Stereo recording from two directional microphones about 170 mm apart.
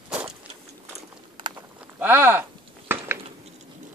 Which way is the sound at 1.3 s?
30° right (ahead or behind).